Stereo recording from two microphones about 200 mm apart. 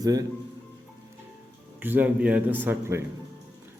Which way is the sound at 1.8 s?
10° right (ahead or behind).